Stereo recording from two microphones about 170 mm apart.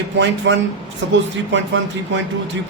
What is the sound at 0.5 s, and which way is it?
Speech, 90° right.